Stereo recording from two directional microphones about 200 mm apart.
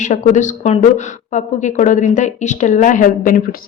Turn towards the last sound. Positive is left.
turn(degrees=40)  # may be behind; listen again after turning